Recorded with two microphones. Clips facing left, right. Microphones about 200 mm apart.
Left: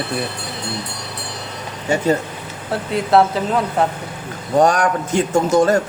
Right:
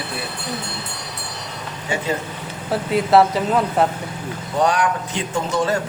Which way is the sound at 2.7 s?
Centre (ahead or behind).